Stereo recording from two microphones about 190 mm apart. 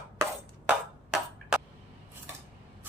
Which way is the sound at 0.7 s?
5° right (ahead or behind).